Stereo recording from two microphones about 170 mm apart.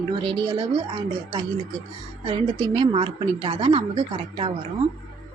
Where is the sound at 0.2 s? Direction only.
25° right (ahead or behind).